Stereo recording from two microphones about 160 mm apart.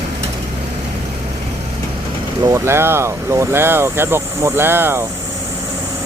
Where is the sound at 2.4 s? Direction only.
20° right (ahead or behind).